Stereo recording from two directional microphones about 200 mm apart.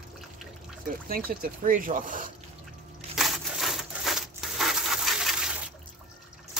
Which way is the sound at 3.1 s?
Centre (ahead or behind).